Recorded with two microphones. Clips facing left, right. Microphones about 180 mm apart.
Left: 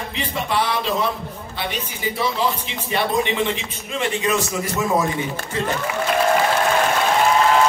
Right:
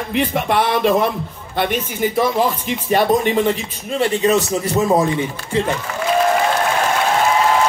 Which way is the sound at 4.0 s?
35° right (ahead or behind).